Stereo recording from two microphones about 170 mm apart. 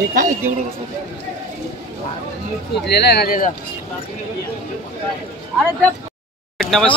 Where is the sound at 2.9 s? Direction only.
70° left (ahead or behind); by 3.5 s 55° left (ahead or behind).